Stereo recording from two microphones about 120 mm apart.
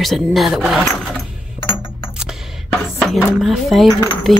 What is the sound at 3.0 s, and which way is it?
Speech, centre (ahead or behind).